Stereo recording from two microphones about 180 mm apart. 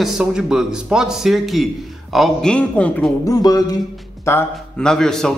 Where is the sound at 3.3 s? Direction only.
20° left (ahead or behind).